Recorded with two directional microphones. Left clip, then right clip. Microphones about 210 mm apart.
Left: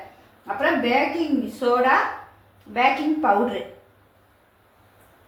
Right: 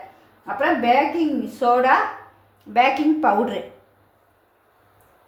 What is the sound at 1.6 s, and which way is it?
Speech, 55° right (ahead or behind).